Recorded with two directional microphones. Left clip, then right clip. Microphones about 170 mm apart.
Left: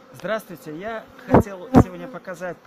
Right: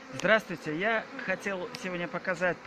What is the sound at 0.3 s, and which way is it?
Speech, 10° left (ahead or behind).